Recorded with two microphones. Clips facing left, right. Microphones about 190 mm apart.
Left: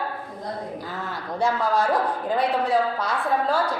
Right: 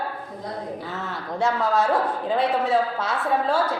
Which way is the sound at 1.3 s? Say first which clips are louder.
Even; centre (ahead or behind).